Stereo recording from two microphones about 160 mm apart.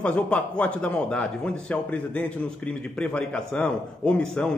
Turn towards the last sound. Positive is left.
turn(degrees=5)  # may be behind; listen again after turning